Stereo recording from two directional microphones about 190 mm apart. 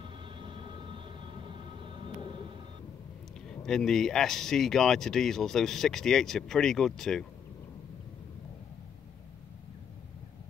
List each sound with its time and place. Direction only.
0.4 s vehicle: 25° right (ahead or behind)
3.4 s speech: 5° left (ahead or behind)